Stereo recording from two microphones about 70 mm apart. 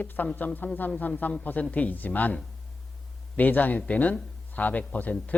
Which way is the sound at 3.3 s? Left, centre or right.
Left.